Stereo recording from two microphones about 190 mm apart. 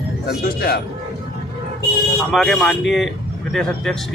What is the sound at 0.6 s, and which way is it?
Speech, 55° left (ahead or behind).